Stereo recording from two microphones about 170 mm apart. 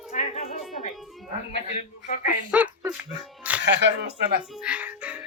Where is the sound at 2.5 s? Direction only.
10° right (ahead or behind).